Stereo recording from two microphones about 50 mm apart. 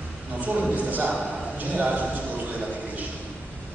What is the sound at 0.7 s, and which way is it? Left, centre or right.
A man's voice, right.